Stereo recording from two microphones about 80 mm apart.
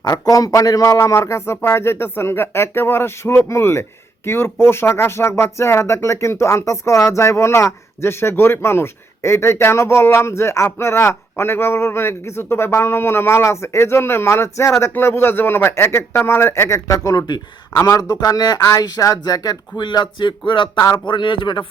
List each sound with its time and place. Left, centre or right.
0.1 s speech: left